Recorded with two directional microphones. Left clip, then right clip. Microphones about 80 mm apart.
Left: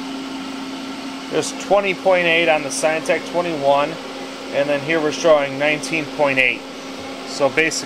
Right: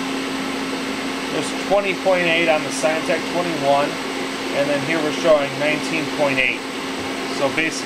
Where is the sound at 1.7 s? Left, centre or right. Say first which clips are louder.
Left 2 dB; left.